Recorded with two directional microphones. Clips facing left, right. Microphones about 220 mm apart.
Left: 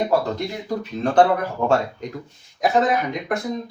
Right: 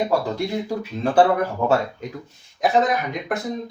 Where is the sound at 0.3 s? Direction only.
10° right (ahead or behind).